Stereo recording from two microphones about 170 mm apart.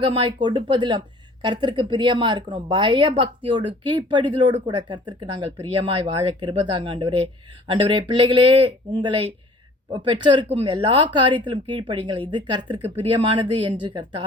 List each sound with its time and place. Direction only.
0.1 s speech: 30° right (ahead or behind)